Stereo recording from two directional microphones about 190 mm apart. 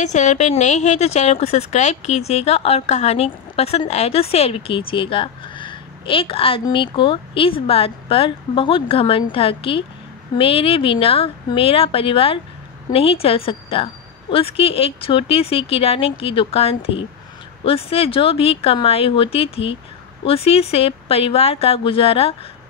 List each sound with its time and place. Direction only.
0.0 s a woman's voice: 40° left (ahead or behind)